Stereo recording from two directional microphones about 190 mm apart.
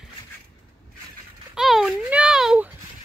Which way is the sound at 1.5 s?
Centre (ahead or behind).